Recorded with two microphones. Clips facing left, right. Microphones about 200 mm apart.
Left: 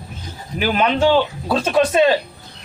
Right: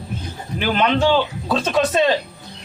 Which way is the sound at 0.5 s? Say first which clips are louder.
Left 1 dB; 10° left (ahead or behind).